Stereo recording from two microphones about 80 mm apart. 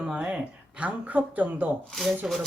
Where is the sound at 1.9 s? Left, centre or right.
Centre.